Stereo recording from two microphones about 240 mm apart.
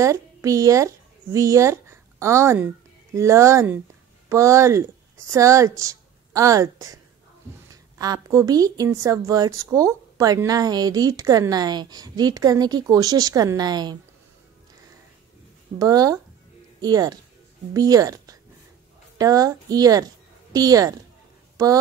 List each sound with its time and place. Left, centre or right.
0.0 s a woman's voice: centre
15.8 s a woman's voice: centre